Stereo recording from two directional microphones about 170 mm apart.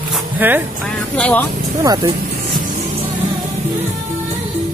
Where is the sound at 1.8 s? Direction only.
20° right (ahead or behind).